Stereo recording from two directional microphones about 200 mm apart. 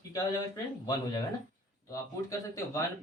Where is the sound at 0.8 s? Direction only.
20° left (ahead or behind).